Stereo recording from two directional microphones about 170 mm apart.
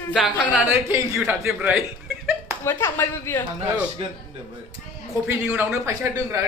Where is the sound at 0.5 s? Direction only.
10° right (ahead or behind).